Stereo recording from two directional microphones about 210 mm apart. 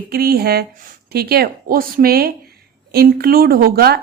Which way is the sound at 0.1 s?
45° right (ahead or behind).